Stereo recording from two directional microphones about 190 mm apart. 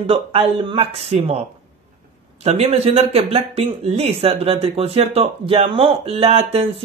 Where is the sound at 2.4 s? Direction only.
35° right (ahead or behind).